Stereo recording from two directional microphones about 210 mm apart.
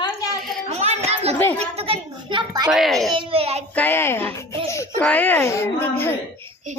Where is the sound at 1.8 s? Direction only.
25° right (ahead or behind).